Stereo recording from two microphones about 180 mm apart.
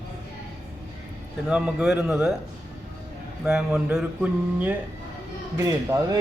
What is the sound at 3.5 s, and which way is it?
Mantra, 5° right (ahead or behind).